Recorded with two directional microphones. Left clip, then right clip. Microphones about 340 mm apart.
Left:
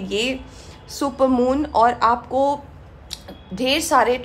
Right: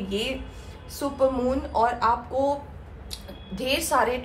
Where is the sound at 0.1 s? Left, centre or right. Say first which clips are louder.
Left 7 dB; left.